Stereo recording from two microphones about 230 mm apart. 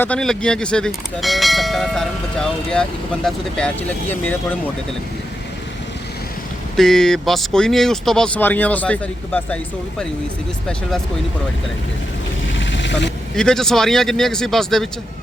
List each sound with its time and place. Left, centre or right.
0.0 s speech: centre
6.7 s speech: centre
12.5 s a sound: left
13.3 s speech: centre